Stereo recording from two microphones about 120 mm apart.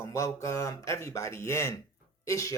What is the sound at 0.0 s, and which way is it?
A woman's voice, 25° left (ahead or behind).